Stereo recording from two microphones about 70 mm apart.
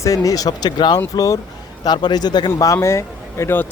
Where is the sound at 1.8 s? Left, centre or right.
Left.